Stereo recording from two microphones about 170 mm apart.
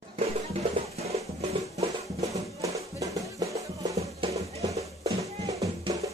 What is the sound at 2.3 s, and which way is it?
Music, 20° right (ahead or behind).